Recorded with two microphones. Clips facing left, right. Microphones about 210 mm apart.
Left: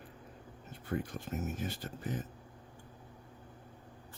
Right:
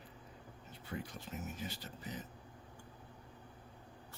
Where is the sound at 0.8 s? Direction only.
50° left (ahead or behind).